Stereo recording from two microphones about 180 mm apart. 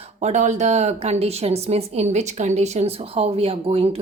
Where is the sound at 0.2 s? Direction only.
40° right (ahead or behind).